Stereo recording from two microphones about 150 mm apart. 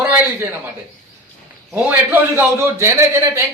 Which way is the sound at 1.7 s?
10° right (ahead or behind).